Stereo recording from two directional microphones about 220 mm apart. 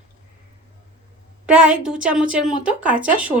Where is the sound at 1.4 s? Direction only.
5° right (ahead or behind).